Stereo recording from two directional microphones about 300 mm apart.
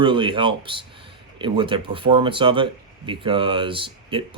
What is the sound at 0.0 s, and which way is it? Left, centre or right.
Speech, centre.